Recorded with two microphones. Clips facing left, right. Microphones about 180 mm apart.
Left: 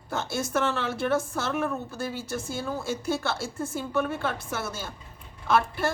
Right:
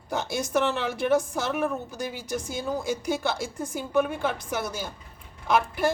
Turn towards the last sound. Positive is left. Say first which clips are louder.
# right 1 dB
turn(degrees=-15)  # may be behind; listen again after turning